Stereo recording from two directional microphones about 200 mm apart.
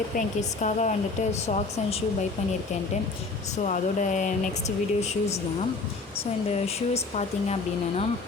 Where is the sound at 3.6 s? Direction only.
40° left (ahead or behind).